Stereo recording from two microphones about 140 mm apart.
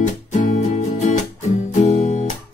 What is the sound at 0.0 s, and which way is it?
Music, 65° left (ahead or behind).